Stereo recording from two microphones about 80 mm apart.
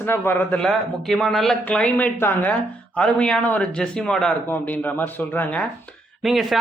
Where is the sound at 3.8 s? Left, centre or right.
Centre.